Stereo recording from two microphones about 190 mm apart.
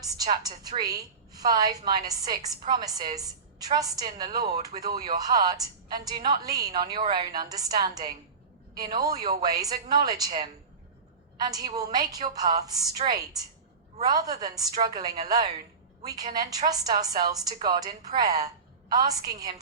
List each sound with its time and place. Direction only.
0.0 s a woman's voice: 20° right (ahead or behind)
13.0 s a woman's voice: 35° right (ahead or behind)
14.0 s a woman's voice: 20° right (ahead or behind)
16.3 s a woman's voice: 20° right (ahead or behind)